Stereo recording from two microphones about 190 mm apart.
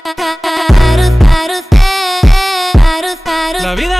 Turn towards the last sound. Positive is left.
turn(degrees=0)  # may be behind; listen again after turning